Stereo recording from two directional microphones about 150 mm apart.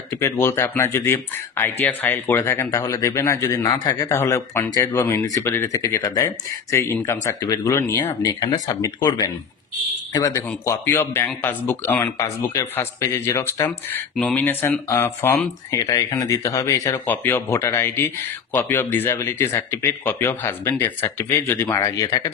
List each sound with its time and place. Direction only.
0.1 s a man's voice: 20° left (ahead or behind)
17.0 s a man's voice: 15° left (ahead or behind)